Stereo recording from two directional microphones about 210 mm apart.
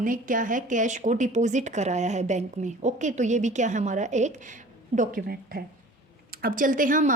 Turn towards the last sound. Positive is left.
turn(degrees=-40)  # may be behind; listen again after turning